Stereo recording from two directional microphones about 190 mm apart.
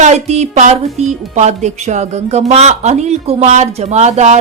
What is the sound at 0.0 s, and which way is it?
Speech, 35° right (ahead or behind).